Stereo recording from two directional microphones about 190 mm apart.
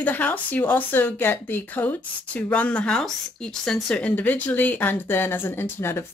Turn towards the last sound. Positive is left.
turn(degrees=10)  # may be behind; listen again after turning